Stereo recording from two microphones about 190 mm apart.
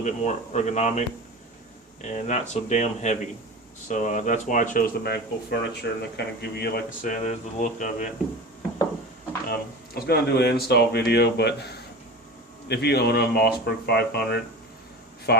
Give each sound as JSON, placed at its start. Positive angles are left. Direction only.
{"t": 0.0, "sound": "speech", "side_deg": 40}
{"t": 9.5, "sound": "speech", "side_deg": 55}